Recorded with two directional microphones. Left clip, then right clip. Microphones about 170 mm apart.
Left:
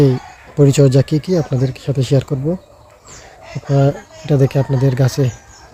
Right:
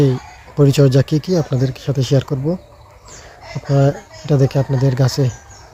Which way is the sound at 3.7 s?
10° left (ahead or behind).